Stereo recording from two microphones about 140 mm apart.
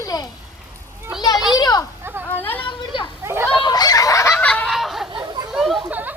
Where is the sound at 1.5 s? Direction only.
25° left (ahead or behind).